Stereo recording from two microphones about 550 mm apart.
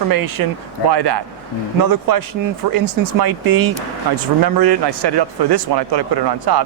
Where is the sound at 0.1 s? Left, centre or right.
Right.